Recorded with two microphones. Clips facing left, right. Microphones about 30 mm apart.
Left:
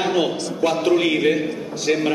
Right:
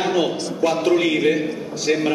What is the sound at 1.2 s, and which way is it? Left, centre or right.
Speech, centre.